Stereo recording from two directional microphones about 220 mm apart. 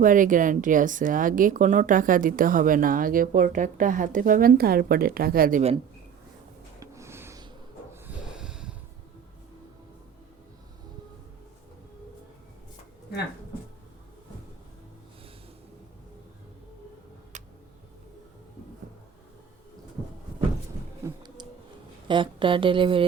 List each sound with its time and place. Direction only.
0.0 s speech: 35° right (ahead or behind)
6.7 s a sound: 15° right (ahead or behind)
8.0 s snort: 5° right (ahead or behind)
17.3 s tick-tock: 35° right (ahead or behind)
22.0 s speech: 20° right (ahead or behind)